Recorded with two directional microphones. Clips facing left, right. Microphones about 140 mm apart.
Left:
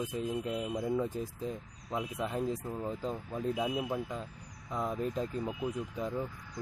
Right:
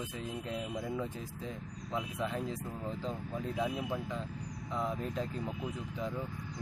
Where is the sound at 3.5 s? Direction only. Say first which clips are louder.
Right 1 dB; 10° left (ahead or behind).